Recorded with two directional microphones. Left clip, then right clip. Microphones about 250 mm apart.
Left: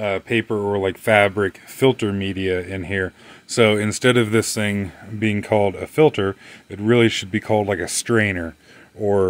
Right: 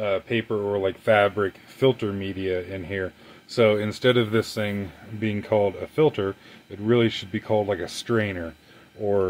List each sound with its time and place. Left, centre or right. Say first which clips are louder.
0.0 s speech: left 4 dB; left